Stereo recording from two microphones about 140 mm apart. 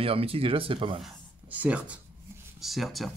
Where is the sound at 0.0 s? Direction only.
40° right (ahead or behind).